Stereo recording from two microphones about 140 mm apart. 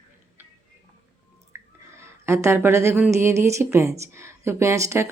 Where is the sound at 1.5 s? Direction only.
20° right (ahead or behind).